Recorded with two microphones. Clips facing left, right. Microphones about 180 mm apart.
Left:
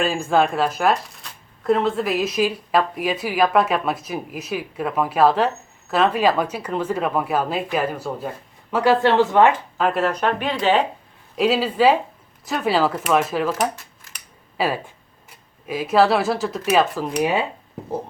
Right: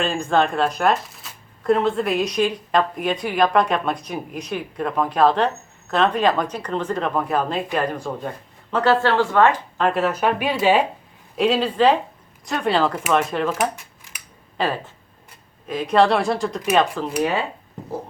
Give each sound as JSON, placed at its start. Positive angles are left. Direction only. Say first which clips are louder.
{"t": 0.0, "sound": "speech", "louder": "left 1 dB", "side_deg": 5}
{"t": 9.7, "sound": "speech", "louder": "even", "side_deg": 0}
{"t": 11.3, "sound": "speech", "louder": "even", "side_deg": 5}
{"t": 13.5, "sound": "a sound", "louder": "even", "side_deg": -10}
{"t": 14.6, "sound": "speech", "louder": "left 1 dB", "side_deg": 10}